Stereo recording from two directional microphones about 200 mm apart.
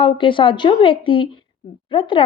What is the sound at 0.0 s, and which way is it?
A woman's voice, 25° left (ahead or behind).